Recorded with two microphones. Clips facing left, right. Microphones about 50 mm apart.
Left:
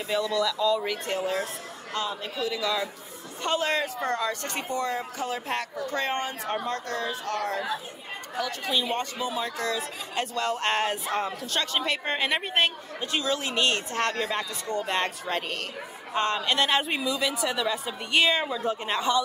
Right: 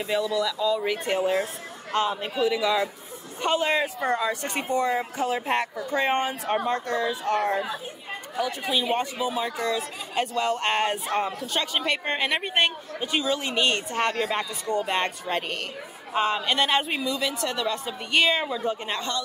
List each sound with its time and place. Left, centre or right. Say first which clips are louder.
0.0 s a woman's voice: right 1 dB; centre
1.0 s a woman's voice: right 4 dB; right; by 14.0 s centre
14.0 s a woman's voice: right 3 dB; centre
18.9 s a man's voice: left 5 dB; centre